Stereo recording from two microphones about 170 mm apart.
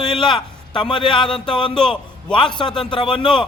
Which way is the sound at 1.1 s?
5° left (ahead or behind).